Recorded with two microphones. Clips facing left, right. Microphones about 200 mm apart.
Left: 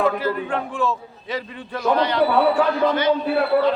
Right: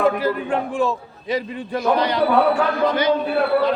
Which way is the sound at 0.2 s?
15° right (ahead or behind).